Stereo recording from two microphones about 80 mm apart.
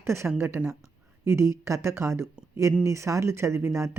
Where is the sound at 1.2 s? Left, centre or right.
Right.